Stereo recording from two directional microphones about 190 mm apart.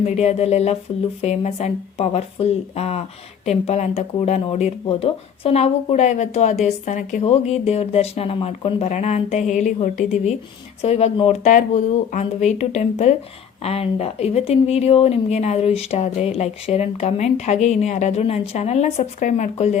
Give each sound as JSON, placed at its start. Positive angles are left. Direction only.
{"t": 0.0, "sound": "speech", "side_deg": 35}